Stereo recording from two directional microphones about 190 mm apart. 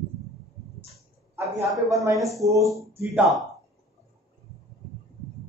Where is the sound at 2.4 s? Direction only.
15° right (ahead or behind).